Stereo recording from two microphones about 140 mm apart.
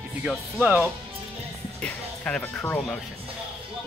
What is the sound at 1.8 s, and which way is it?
Speech, 10° left (ahead or behind).